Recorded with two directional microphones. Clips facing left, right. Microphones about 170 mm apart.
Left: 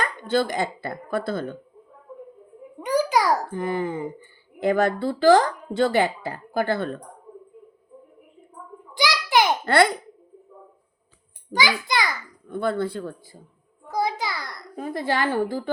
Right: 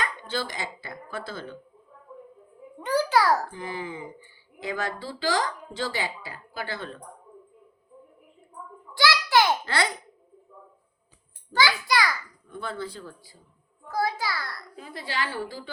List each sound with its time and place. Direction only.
0.0 s speech: 50° left (ahead or behind)
2.8 s babbling: 15° left (ahead or behind)
3.5 s speech: 55° left (ahead or behind)
9.0 s a sound: 15° left (ahead or behind)
9.6 s speech: 55° left (ahead or behind)
11.5 s a child's voice: 20° left (ahead or behind)
12.5 s speech: 60° left (ahead or behind)
13.9 s a child's voice: 20° left (ahead or behind)
14.8 s speech: 50° left (ahead or behind)